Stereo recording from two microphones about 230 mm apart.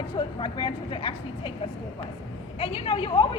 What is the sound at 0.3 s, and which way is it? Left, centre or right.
Speech, centre.